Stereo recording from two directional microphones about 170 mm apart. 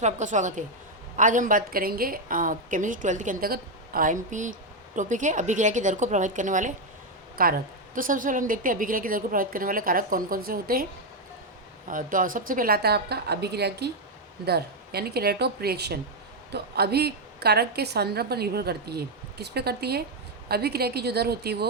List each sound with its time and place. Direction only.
0.0 s a woman's voice: 45° right (ahead or behind)
7.4 s a woman's voice: 60° right (ahead or behind)
11.9 s a woman's voice: 50° right (ahead or behind); by 21.7 s 70° right (ahead or behind)